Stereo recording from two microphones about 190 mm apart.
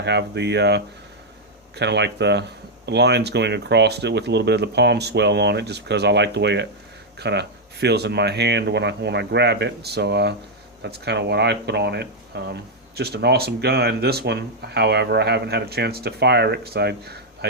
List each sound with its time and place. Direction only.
0.0 s speech: 65° right (ahead or behind)